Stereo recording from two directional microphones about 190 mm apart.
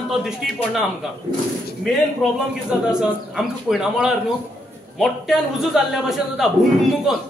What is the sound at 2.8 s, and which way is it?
A man's voice, 5° right (ahead or behind).